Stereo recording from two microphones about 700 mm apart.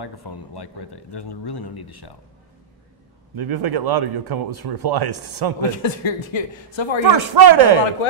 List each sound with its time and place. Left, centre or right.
0.0 s speech: left
3.3 s speech: right
5.8 s speech: left
7.1 s speech: right